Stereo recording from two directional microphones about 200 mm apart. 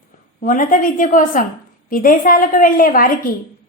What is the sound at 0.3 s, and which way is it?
A woman's voice, 40° left (ahead or behind).